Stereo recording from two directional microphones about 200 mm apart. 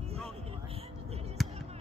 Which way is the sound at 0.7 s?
30° right (ahead or behind).